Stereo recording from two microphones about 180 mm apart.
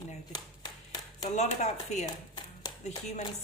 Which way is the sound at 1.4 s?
40° left (ahead or behind).